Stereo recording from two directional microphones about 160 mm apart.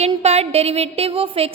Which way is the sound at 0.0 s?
40° right (ahead or behind).